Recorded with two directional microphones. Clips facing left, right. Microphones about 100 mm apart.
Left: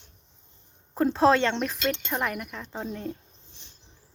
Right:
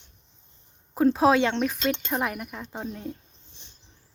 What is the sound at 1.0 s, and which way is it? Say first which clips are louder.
Speech: right 1 dB; 5° right (ahead or behind).